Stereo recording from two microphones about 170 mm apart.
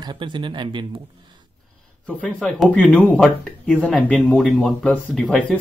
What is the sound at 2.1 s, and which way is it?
Speech, 5° left (ahead or behind).